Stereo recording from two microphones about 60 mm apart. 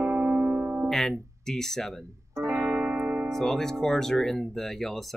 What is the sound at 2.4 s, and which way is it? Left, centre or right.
Music, right.